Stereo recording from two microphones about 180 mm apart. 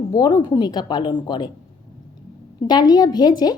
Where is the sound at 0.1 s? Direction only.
20° left (ahead or behind).